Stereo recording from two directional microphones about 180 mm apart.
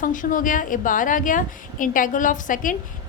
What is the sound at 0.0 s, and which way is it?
A woman's voice, 45° left (ahead or behind).